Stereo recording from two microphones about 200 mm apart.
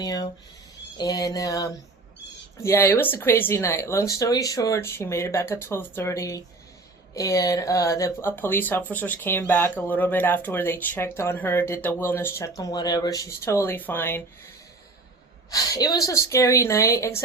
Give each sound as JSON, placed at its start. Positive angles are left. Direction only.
{"t": 0.0, "sound": "speech", "side_deg": 20}
{"t": 15.4, "sound": "speech", "side_deg": 20}